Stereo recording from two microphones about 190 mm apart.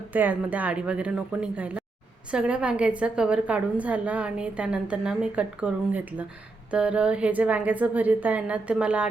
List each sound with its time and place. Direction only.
0.1 s a woman's voice: 10° right (ahead or behind)